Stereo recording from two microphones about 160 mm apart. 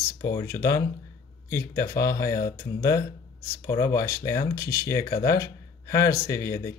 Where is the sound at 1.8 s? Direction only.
20° left (ahead or behind).